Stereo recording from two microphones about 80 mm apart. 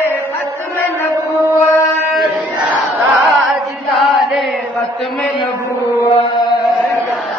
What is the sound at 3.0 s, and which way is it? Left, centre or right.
Choir, right.